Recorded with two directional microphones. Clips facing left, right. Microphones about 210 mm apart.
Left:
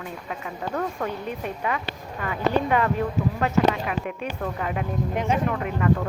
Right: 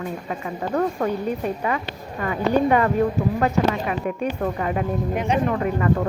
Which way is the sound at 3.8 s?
40° right (ahead or behind).